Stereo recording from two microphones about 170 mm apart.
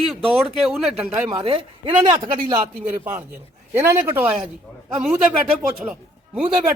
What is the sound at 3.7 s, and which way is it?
Speech, 15° right (ahead or behind).